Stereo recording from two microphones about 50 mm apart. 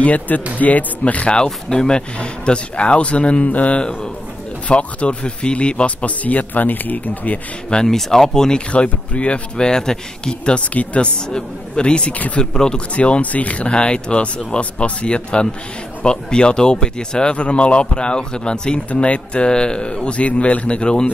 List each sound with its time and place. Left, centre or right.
0.0 s speech: left
7.7 s speech: centre
9.6 s speech: centre
10.6 s speech: left